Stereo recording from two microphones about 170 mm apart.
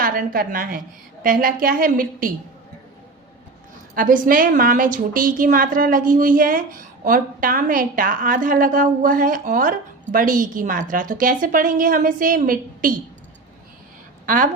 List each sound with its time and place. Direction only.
0.0 s a woman's voice: 55° right (ahead or behind)
3.9 s a woman's voice: 55° right (ahead or behind)
14.3 s a woman's voice: 55° right (ahead or behind)